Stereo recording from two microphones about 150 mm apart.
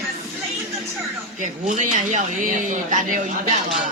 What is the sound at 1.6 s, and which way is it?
Speech, 60° right (ahead or behind).